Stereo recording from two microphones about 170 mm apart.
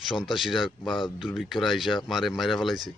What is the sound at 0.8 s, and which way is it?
Speech, 30° left (ahead or behind).